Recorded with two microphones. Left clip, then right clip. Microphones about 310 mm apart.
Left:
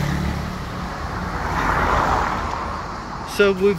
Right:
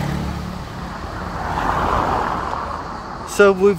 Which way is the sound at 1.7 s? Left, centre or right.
Right.